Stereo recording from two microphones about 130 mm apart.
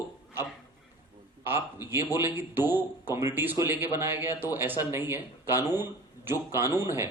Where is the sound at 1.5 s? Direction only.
15° right (ahead or behind).